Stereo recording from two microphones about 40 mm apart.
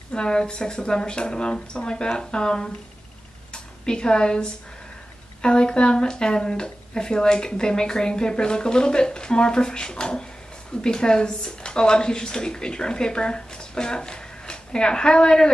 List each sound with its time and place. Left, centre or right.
0.1 s speech: left